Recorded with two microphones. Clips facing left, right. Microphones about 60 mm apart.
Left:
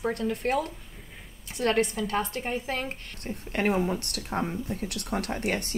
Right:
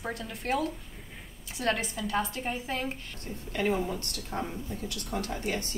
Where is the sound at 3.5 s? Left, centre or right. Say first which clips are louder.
Left 3 dB; left.